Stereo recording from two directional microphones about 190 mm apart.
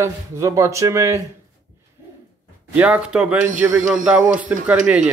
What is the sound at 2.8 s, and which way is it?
Speech, 5° right (ahead or behind).